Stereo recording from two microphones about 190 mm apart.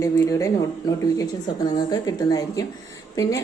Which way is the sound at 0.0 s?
15° left (ahead or behind).